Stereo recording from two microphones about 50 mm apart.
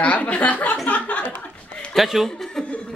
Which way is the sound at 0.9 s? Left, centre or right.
Left.